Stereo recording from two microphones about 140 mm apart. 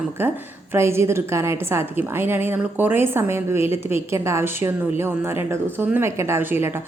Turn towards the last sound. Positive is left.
turn(degrees=-15)  # may be behind; listen again after turning